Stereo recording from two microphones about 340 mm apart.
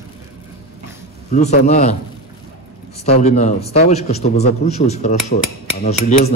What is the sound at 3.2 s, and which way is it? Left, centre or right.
A man's voice, centre.